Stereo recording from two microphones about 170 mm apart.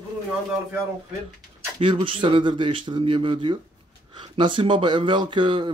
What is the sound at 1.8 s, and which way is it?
Speech, 30° right (ahead or behind).